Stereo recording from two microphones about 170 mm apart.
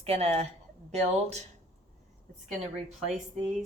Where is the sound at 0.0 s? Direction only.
40° right (ahead or behind).